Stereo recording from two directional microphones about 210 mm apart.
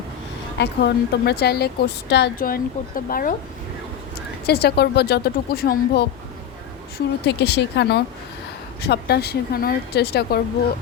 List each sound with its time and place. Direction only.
0.6 s a woman's voice: 50° left (ahead or behind)
4.4 s a woman's voice: 50° left (ahead or behind)
7.3 s a woman's voice: 50° left (ahead or behind)